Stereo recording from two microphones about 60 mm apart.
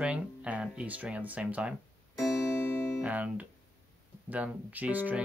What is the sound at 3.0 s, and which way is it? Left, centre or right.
Speech, right.